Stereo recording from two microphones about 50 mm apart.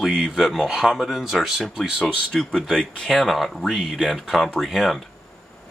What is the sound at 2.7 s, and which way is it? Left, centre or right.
Speech, centre.